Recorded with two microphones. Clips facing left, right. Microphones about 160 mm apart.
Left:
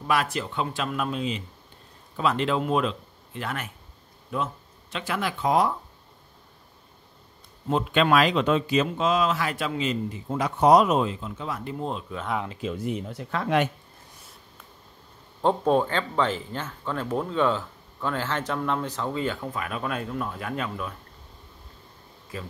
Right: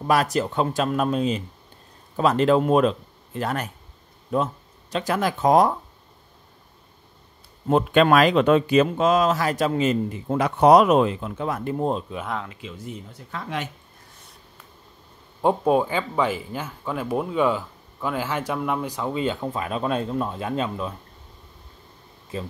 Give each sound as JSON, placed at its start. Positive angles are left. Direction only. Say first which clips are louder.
{"t": 0.0, "sound": "speech", "louder": "right 5 dB", "side_deg": -40}
{"t": 4.9, "sound": "speech", "louder": "right 6 dB", "side_deg": -40}
{"t": 7.7, "sound": "speech", "louder": "right 4 dB", "side_deg": -50}
{"t": 10.2, "sound": "speech", "louder": "right 4 dB", "side_deg": -65}
{"t": 12.6, "sound": "speech", "louder": "left 7 dB", "side_deg": 65}
{"t": 15.4, "sound": "speech", "louder": "right 2 dB", "side_deg": -10}
{"t": 22.3, "sound": "speech", "louder": "right 5 dB", "side_deg": -25}